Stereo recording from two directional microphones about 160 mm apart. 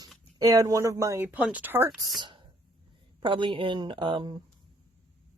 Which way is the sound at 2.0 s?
25° right (ahead or behind).